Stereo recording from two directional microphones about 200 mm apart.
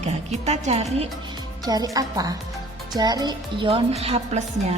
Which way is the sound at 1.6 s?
20° right (ahead or behind).